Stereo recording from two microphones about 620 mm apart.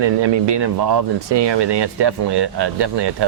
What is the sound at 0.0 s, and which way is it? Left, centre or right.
Speech, right.